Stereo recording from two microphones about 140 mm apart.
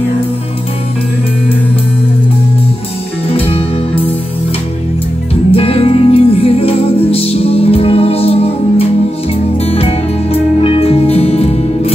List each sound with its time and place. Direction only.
3.3 s music: 45° left (ahead or behind)
5.5 s music: 45° left (ahead or behind)